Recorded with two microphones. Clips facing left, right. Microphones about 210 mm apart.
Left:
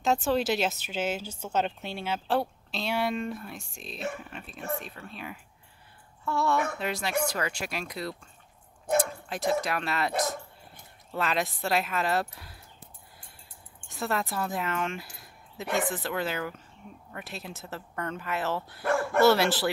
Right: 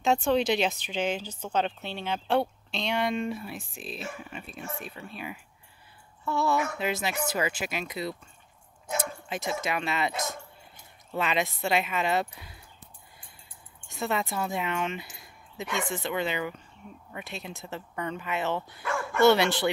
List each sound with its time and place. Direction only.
0.0 s speech: centre (ahead or behind)
13.8 s speech: centre (ahead or behind)
18.8 s dog: 55° left (ahead or behind)
19.2 s speech: centre (ahead or behind)